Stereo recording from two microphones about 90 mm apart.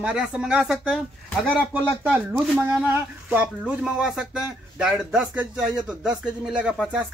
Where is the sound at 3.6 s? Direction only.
10° right (ahead or behind).